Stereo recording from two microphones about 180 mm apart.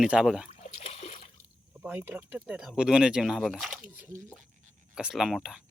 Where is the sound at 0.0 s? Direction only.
5° right (ahead or behind).